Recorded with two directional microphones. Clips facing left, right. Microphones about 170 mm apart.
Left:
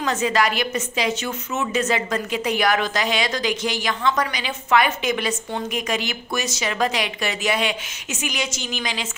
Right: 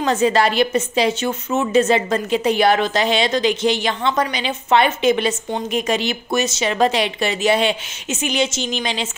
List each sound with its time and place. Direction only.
0.0 s a woman's voice: 30° right (ahead or behind)